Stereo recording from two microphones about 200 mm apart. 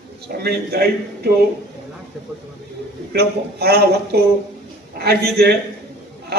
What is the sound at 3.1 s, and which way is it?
A man's voice, 50° right (ahead or behind).